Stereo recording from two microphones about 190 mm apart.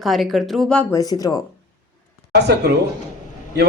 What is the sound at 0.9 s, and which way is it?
Speech, 20° left (ahead or behind).